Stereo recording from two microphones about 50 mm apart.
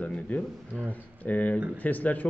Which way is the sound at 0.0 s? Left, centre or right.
Left.